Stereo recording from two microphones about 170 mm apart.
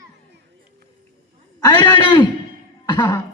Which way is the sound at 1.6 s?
25° left (ahead or behind).